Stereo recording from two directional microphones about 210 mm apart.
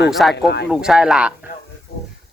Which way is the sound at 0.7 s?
5° right (ahead or behind).